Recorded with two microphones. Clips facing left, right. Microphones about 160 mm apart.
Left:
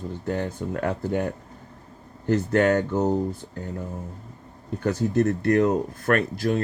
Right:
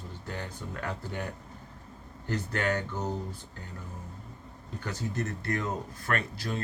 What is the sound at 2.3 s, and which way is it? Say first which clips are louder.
Speech: left 11 dB; 45° left (ahead or behind).